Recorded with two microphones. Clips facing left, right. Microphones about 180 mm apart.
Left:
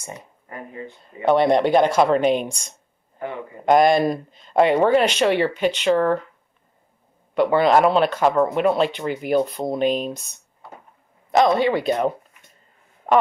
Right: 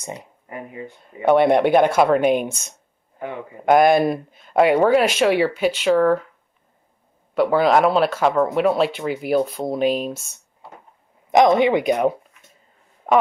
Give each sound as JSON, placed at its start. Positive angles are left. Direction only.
{"t": 0.0, "sound": "speech", "side_deg": -20}
{"t": 7.3, "sound": "speech", "side_deg": 0}
{"t": 11.3, "sound": "speech", "side_deg": -20}
{"t": 13.0, "sound": "speech", "side_deg": 0}